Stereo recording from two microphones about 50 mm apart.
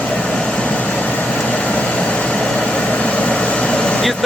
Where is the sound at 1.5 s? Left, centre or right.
Left.